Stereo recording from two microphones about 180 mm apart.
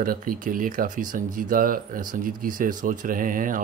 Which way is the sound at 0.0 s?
50° right (ahead or behind).